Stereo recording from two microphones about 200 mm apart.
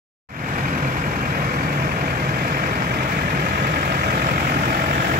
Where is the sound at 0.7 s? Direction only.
45° right (ahead or behind).